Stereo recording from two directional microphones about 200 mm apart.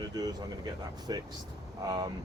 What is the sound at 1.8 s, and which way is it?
Speech, 20° right (ahead or behind).